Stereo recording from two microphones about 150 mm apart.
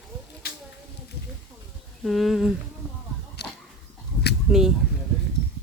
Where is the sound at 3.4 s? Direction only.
90° left.